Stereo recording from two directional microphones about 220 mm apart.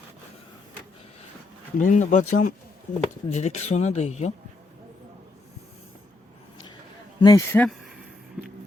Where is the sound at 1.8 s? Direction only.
35° left (ahead or behind).